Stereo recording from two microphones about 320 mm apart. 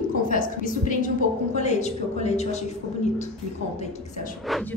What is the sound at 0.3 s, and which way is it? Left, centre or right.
A woman's voice, left.